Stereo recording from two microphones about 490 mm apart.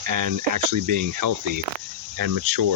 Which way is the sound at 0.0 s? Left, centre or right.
Right.